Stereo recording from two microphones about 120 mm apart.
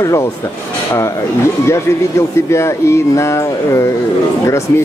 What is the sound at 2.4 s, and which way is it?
Speech, 25° left (ahead or behind).